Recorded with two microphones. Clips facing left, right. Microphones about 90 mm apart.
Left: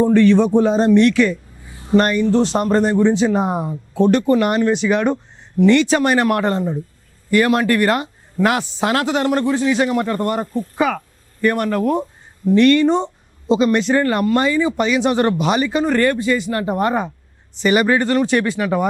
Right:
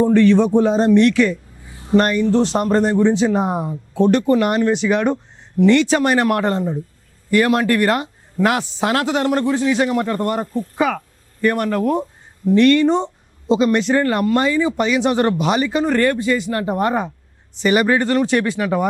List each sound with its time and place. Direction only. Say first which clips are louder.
0.0 s a man's voice: even; 20° left (ahead or behind)